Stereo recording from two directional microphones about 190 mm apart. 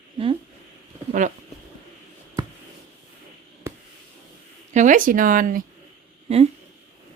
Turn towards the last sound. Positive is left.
turn(degrees=-35)  # may be behind; listen again after turning